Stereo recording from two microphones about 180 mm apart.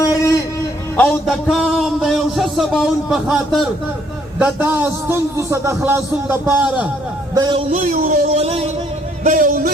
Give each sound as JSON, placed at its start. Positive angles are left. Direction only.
{"t": 0.0, "sound": "a sound", "side_deg": 20}
{"t": 0.9, "sound": "a man's voice", "side_deg": 5}
{"t": 7.3, "sound": "a man's voice", "side_deg": -25}
{"t": 7.7, "sound": "a man's voice", "side_deg": -45}